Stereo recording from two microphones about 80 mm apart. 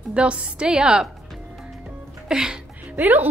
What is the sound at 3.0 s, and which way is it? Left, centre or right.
Speech, right.